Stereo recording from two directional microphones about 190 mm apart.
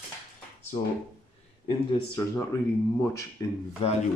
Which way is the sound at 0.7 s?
35° left (ahead or behind).